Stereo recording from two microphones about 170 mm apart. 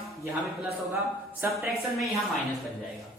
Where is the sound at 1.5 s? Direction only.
Centre (ahead or behind).